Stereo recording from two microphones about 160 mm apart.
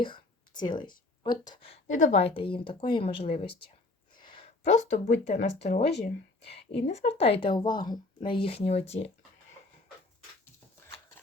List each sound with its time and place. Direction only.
0.0 s speech: 30° left (ahead or behind)
1.9 s speech: 50° left (ahead or behind)